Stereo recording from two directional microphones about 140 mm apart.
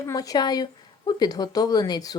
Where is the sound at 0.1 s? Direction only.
25° left (ahead or behind).